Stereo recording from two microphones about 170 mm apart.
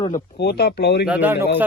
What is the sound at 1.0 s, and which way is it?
Speech, 10° right (ahead or behind).